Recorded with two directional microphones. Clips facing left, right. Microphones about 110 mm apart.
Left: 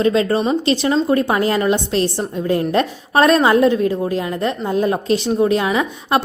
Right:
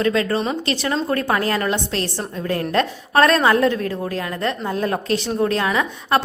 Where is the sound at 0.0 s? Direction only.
25° left (ahead or behind).